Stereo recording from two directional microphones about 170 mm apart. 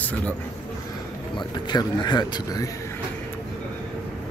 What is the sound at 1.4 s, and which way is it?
Speech, 25° left (ahead or behind).